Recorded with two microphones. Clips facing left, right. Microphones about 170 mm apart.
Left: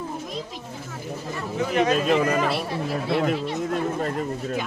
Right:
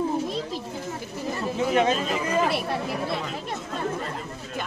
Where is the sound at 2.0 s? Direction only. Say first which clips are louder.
Left 7 dB; 75° left (ahead or behind).